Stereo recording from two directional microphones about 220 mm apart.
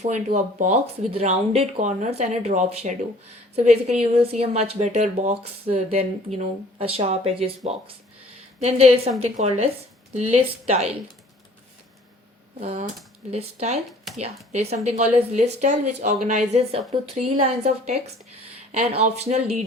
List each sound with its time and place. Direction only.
0.0 s speech: 30° right (ahead or behind)
12.5 s speech: 30° right (ahead or behind)